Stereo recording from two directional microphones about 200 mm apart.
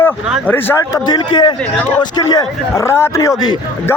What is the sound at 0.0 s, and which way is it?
Speech, 10° left (ahead or behind).